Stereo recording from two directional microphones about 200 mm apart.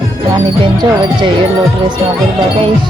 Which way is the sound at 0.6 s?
25° right (ahead or behind).